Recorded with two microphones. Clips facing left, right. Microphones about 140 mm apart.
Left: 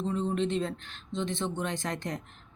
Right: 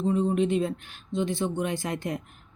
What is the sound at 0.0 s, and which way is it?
Speech, 10° right (ahead or behind).